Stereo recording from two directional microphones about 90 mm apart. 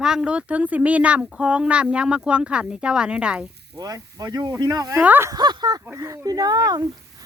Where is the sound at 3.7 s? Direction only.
40° right (ahead or behind).